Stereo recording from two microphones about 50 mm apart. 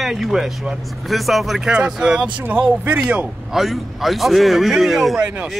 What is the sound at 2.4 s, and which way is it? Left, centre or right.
Speech, right.